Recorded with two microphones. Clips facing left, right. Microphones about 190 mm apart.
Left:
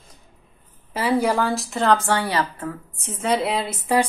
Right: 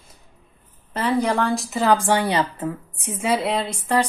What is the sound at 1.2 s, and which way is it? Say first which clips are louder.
Speech: even; 5° left (ahead or behind).